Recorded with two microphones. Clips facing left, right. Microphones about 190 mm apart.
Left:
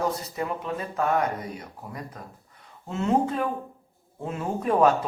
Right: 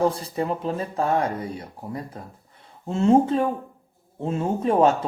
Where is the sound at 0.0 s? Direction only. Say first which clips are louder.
Right 5 dB; 30° right (ahead or behind).